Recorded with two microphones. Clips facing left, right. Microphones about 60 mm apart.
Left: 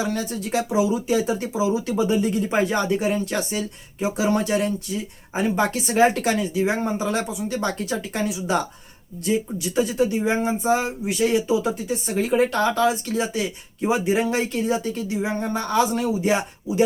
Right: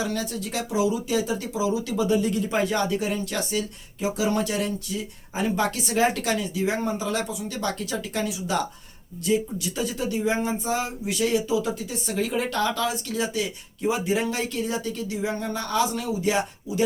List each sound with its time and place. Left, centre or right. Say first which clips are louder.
0.0 s speech: left 3 dB; left